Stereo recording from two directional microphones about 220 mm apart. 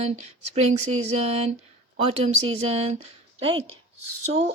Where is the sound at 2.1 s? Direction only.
25° right (ahead or behind).